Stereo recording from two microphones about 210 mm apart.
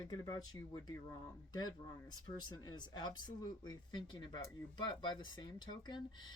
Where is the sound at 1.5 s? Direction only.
20° left (ahead or behind).